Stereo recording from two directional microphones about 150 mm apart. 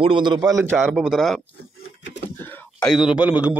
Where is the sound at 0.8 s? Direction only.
5° right (ahead or behind).